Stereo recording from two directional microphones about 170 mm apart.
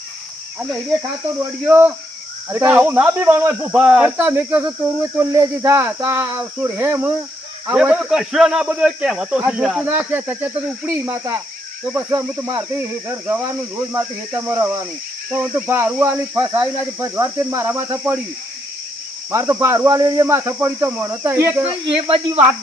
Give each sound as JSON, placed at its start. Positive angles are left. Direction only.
{"t": 0.6, "sound": "speech", "side_deg": 0}
{"t": 1.6, "sound": "a man's voice", "side_deg": -10}
{"t": 12.2, "sound": "speech", "side_deg": -5}
{"t": 12.5, "sound": "a man's voice", "side_deg": -15}
{"t": 19.3, "sound": "a man's voice", "side_deg": -15}
{"t": 21.7, "sound": "speech", "side_deg": -30}